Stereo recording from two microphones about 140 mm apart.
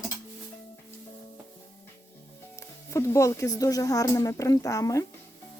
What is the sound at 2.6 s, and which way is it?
Speech, 20° left (ahead or behind).